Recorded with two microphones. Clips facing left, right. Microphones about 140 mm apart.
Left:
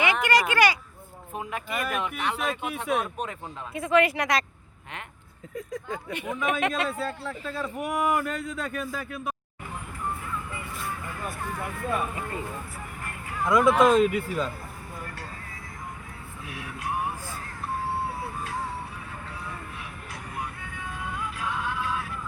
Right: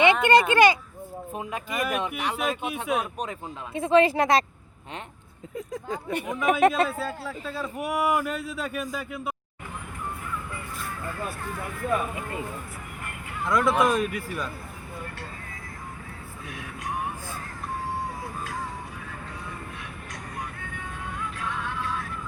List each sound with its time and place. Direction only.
0.0 s speech: 25° right (ahead or behind)
3.8 s speech: 30° right (ahead or behind)
5.5 s speech: 25° right (ahead or behind)
6.4 s speech: 40° right (ahead or behind)
6.8 s speech: 5° right (ahead or behind)
13.4 s speech: 15° left (ahead or behind)
16.5 s music: 10° left (ahead or behind)
21.2 s vehicle: 10° left (ahead or behind)